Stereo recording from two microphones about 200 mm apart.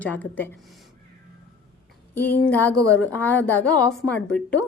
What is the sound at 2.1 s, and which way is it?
A woman's voice, 10° left (ahead or behind).